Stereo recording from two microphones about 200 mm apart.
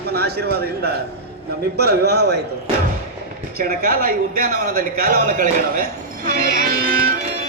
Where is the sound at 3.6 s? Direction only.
45° right (ahead or behind).